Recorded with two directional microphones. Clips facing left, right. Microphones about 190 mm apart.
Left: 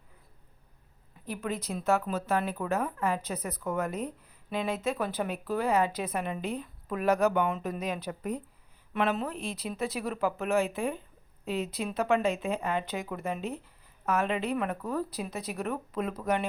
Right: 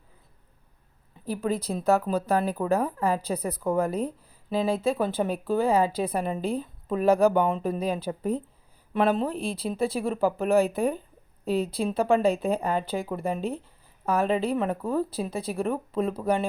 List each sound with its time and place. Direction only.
1.2 s speech: 35° right (ahead or behind)